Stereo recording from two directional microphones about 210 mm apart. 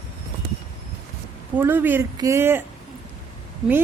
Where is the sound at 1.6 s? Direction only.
10° right (ahead or behind).